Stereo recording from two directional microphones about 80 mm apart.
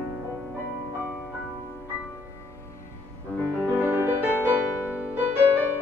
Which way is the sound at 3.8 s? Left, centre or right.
Right.